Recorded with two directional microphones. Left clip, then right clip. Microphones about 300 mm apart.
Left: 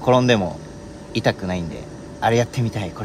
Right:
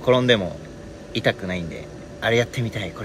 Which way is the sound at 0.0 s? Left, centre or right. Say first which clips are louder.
Left 1 dB; left.